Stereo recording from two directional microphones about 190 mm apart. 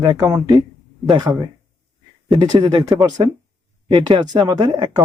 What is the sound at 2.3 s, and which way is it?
Speech, 25° right (ahead or behind).